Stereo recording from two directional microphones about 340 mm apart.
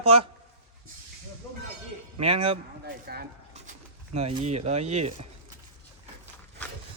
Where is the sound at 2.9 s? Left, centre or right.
Right.